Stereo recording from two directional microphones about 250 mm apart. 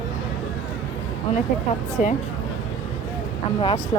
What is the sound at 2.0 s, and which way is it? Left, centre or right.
Speech, left.